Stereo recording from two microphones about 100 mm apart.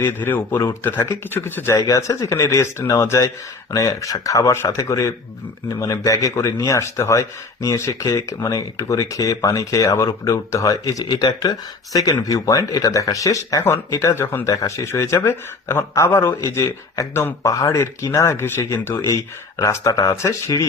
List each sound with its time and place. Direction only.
0.0 s speech: 20° left (ahead or behind)
1.7 s a man's voice: 35° left (ahead or behind)